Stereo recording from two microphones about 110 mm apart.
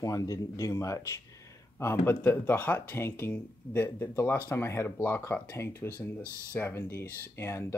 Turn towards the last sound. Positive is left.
turn(degrees=20)  # may be behind; listen again after turning